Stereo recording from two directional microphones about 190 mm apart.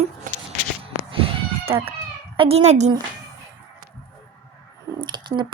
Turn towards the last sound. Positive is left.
turn(degrees=-25)  # may be behind; listen again after turning